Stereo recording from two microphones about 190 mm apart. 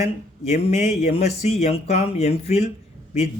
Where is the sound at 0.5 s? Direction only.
35° left (ahead or behind).